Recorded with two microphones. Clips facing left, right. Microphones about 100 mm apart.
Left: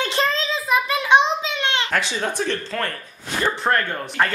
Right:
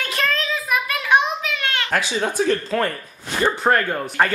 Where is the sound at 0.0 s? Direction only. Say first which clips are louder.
Left 2 dB; 25° left (ahead or behind).